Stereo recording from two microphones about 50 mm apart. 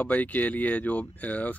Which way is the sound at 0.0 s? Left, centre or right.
Left.